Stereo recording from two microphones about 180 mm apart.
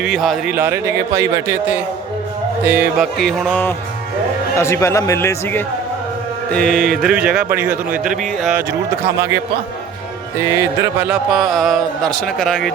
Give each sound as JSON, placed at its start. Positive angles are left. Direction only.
{"t": 0.0, "sound": "speech", "side_deg": 0}
{"t": 0.5, "sound": "a man's voice", "side_deg": -15}
{"t": 3.2, "sound": "speech", "side_deg": 0}
{"t": 10.4, "sound": "speech", "side_deg": -15}